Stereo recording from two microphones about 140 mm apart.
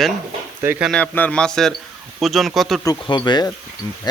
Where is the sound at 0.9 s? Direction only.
10° left (ahead or behind).